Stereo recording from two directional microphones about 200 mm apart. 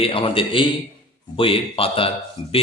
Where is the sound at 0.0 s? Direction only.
25° left (ahead or behind).